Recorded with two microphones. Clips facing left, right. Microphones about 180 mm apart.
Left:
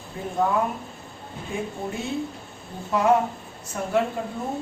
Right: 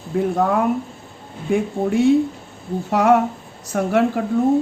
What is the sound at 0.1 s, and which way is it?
Speech, 80° right.